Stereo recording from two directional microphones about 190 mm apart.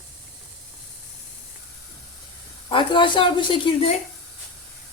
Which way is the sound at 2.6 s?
25° left (ahead or behind).